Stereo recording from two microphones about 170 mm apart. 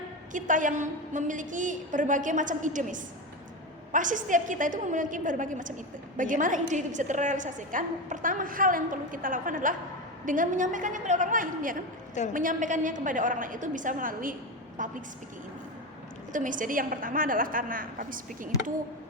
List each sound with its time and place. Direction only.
0.3 s a woman's voice: 50° right (ahead or behind)
16.3 s a woman's voice: 50° right (ahead or behind)